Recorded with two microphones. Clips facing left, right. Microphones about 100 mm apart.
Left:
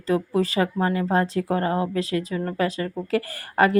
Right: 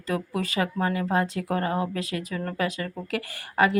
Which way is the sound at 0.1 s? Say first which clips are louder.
Left 6 dB; 30° left (ahead or behind).